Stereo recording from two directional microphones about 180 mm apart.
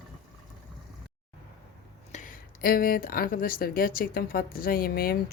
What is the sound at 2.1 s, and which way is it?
Speech, 50° left (ahead or behind).